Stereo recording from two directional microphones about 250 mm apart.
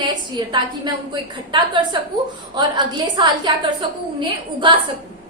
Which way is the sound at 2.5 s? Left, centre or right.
Centre.